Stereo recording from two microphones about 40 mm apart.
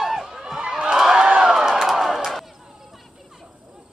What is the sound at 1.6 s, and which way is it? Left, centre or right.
Crowd, centre.